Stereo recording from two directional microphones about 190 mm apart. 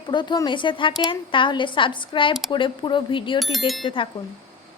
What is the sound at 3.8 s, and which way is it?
Speech, 25° left (ahead or behind).